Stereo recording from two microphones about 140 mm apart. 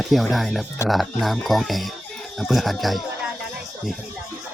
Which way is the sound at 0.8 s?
20° left (ahead or behind).